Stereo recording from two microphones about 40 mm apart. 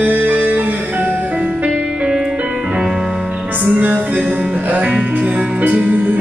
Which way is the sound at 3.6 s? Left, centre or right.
Right.